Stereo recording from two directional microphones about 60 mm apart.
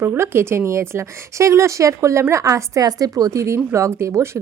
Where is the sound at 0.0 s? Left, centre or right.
Right.